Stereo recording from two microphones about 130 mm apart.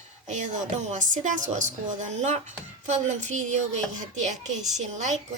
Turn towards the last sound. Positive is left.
turn(degrees=-65)  # may be behind; listen again after turning